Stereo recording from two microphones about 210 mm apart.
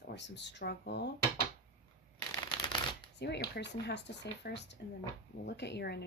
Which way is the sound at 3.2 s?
50° left (ahead or behind).